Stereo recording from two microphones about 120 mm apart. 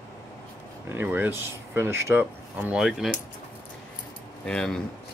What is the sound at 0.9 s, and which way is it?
Speech, 15° right (ahead or behind).